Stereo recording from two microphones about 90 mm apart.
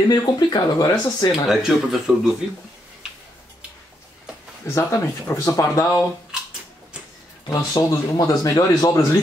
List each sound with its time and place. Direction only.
0.1 s speech: 55° left (ahead or behind)
1.5 s speech: 5° right (ahead or behind)
4.6 s speech: 35° left (ahead or behind)
7.4 s speech: 40° left (ahead or behind)